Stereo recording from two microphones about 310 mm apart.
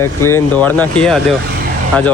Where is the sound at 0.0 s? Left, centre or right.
Centre.